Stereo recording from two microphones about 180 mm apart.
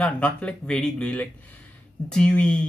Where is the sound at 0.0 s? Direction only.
5° left (ahead or behind).